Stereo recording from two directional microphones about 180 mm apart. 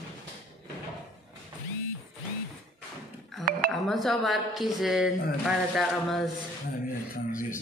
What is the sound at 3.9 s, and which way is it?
A man's voice, centre (ahead or behind).